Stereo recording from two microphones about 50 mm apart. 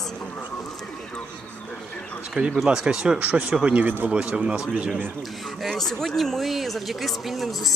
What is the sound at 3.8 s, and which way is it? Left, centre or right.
Speech, right.